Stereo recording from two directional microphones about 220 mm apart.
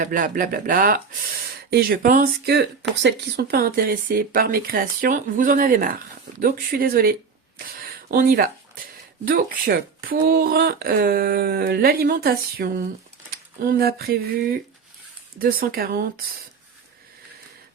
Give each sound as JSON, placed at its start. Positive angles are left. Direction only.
{"t": 0.0, "sound": "speech", "side_deg": -40}